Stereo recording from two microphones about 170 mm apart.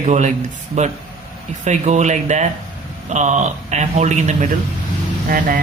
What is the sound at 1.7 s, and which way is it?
Speech, 45° right (ahead or behind).